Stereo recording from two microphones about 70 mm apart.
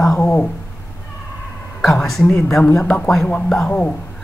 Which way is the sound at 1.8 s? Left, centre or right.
Centre.